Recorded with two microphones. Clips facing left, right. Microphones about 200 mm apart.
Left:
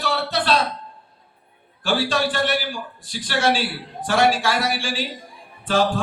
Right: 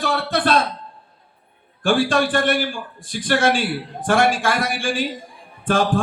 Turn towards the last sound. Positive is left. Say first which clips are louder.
# right 1 dB
turn(degrees=-50)  # may be behind; listen again after turning